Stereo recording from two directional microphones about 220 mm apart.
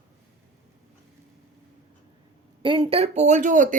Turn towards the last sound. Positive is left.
turn(degrees=-35)  # may be behind; listen again after turning